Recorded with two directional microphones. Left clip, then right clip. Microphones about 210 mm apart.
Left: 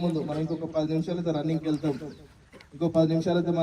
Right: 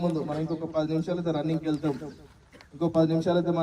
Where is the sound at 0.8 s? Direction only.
30° right (ahead or behind).